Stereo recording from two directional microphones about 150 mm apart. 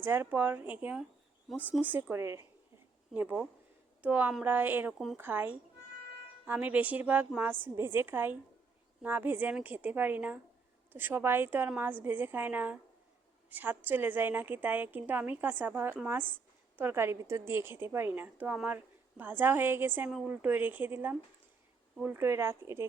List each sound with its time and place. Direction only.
0.0 s a woman's voice: 15° right (ahead or behind)
3.1 s a woman's voice: 10° right (ahead or behind)